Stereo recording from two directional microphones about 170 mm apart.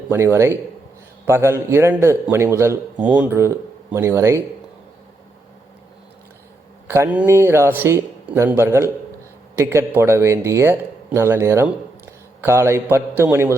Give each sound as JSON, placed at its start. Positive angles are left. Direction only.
{"t": 0.1, "sound": "speech", "side_deg": -15}
{"t": 6.8, "sound": "speech", "side_deg": -15}